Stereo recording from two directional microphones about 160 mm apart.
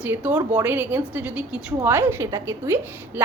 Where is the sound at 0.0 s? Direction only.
10° right (ahead or behind).